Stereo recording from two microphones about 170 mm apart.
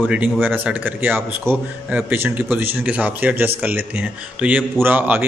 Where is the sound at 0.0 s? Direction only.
5° right (ahead or behind).